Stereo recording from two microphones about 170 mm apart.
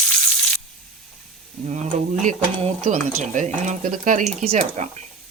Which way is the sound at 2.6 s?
45° right (ahead or behind).